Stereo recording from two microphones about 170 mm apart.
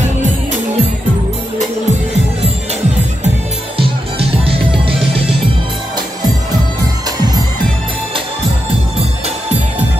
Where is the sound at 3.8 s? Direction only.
35° right (ahead or behind).